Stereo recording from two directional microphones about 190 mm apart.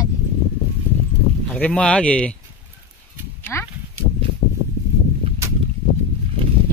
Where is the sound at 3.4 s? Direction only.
10° left (ahead or behind).